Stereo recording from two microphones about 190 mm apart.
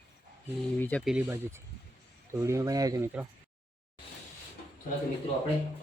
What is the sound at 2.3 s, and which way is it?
Speech, 15° right (ahead or behind).